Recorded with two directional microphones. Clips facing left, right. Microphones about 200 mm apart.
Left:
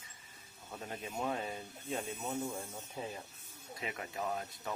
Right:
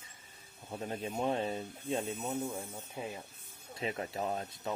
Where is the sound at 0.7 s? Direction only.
30° right (ahead or behind).